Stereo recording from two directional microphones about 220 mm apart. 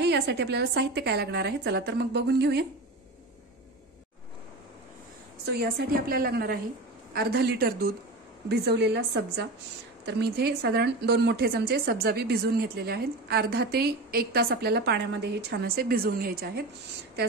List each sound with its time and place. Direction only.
0.0 s a woman's voice: 50° right (ahead or behind)
5.4 s a woman's voice: 45° right (ahead or behind)